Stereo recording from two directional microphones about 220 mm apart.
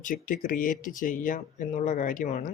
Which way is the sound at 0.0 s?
35° left (ahead or behind).